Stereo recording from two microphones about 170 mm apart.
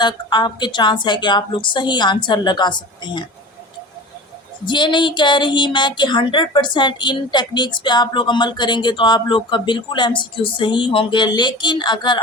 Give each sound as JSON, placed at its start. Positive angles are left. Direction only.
{"t": 0.0, "sound": "speech", "side_deg": 25}
{"t": 4.6, "sound": "speech", "side_deg": 25}